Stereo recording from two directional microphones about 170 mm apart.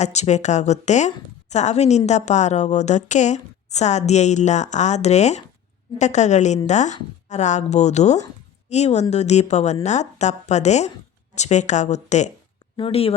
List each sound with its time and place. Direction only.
0.0 s a woman's voice: 40° left (ahead or behind)